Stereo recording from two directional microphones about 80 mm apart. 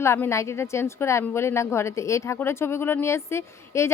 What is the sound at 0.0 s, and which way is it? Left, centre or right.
A woman's voice, left.